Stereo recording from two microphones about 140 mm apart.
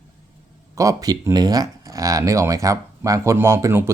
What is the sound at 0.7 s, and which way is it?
Speech, 25° right (ahead or behind).